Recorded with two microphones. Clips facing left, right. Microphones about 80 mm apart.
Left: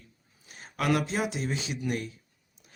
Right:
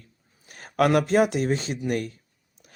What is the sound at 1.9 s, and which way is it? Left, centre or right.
Speech, right.